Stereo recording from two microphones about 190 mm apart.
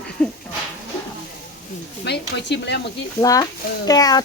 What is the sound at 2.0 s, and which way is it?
Speech, 65° left (ahead or behind).